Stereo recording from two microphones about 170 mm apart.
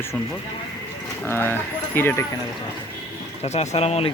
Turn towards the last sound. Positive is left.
turn(degrees=35)  # may be behind; listen again after turning